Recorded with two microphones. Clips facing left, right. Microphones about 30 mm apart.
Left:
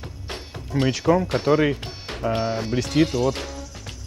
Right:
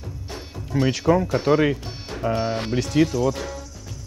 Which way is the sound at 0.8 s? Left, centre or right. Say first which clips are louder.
Even; centre.